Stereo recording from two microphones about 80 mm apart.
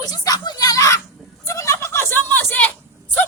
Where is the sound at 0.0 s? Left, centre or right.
Left.